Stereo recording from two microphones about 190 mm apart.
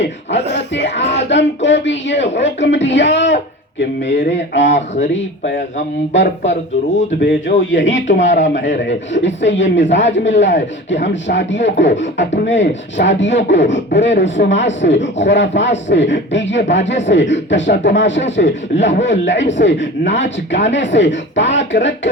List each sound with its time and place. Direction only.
0.7 s speech: 65° left (ahead or behind)
7.2 s speech: 65° left (ahead or behind)